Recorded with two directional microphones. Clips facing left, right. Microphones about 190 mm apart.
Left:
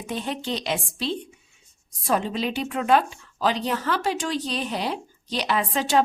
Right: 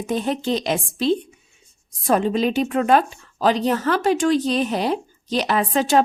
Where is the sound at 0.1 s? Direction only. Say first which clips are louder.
Right 7 dB; 45° right (ahead or behind).